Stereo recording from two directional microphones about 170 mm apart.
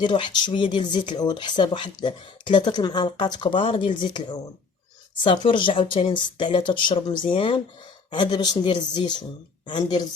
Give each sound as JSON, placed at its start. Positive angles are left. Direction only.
{"t": 0.0, "sound": "speech", "side_deg": 30}